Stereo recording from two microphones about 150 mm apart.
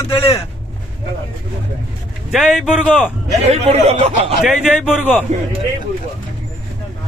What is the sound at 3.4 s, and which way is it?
Speech, 45° right (ahead or behind).